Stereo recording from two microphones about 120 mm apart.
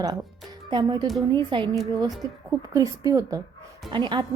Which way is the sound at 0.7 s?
35° right (ahead or behind).